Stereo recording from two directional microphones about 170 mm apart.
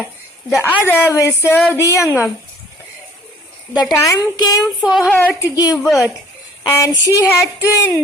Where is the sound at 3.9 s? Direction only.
20° left (ahead or behind).